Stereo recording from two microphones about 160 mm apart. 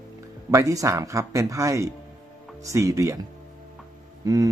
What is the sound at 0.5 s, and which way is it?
Speech, 20° right (ahead or behind).